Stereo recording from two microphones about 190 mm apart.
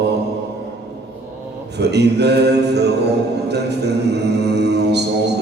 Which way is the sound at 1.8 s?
60° right (ahead or behind).